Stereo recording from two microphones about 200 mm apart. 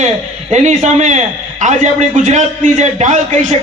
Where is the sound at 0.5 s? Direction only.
35° right (ahead or behind).